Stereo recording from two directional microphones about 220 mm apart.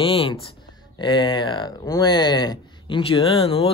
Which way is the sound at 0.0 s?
25° left (ahead or behind).